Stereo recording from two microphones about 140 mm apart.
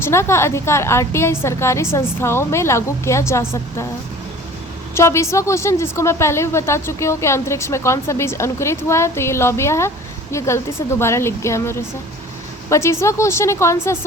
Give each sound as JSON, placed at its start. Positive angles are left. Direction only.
{"t": 0.0, "sound": "a woman's voice", "side_deg": 20}
{"t": 4.9, "sound": "a woman's voice", "side_deg": 20}